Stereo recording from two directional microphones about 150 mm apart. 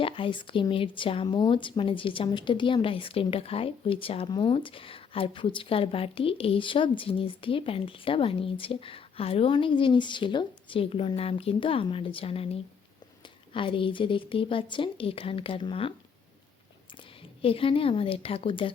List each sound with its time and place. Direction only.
0.0 s speech: 35° left (ahead or behind)
17.0 s a woman's voice: 40° left (ahead or behind)